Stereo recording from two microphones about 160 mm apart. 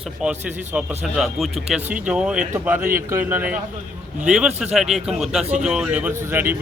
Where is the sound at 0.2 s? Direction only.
10° right (ahead or behind).